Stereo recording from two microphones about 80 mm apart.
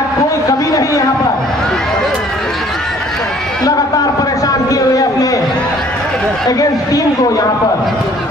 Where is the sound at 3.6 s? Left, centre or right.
Left.